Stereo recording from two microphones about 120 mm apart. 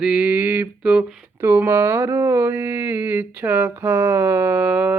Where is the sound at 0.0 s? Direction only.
10° right (ahead or behind).